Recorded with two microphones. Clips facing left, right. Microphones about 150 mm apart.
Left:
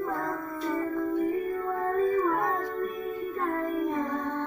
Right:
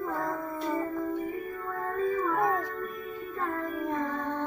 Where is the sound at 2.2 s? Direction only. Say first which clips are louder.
Left 2 dB; 10° left (ahead or behind).